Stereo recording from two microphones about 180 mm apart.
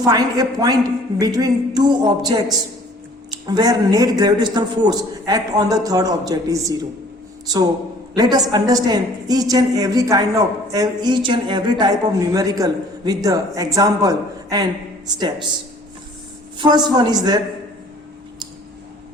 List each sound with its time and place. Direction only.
0.0 s a woman's voice: 20° right (ahead or behind)
8.1 s a woman's voice: 20° right (ahead or behind)
16.6 s a man's voice: 25° right (ahead or behind)